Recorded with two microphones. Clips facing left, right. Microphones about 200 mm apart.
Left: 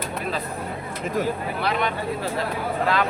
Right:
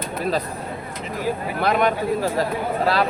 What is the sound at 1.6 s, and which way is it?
Speech, 45° right (ahead or behind).